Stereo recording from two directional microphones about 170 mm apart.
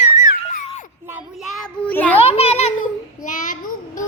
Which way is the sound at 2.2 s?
35° left (ahead or behind).